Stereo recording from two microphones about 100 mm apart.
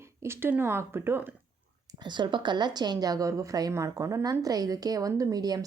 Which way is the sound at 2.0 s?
50° right (ahead or behind).